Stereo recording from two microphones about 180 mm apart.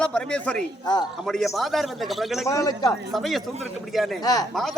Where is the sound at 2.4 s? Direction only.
20° left (ahead or behind).